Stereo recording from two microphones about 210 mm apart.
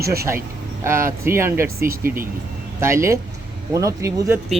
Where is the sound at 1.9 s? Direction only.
45° right (ahead or behind).